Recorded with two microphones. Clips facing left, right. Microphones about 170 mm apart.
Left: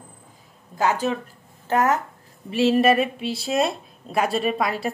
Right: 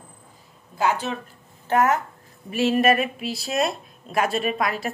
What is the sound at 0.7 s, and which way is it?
Speech, 40° left (ahead or behind).